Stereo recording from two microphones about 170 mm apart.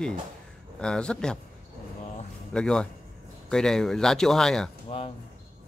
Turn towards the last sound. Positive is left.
turn(degrees=40)  # may be behind; listen again after turning